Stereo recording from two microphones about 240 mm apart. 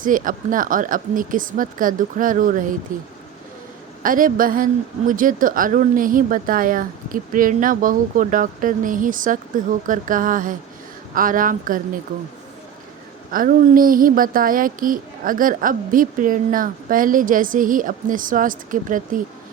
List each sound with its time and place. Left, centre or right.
0.0 s a woman's voice: right
4.0 s a woman's voice: right
13.3 s a woman's voice: right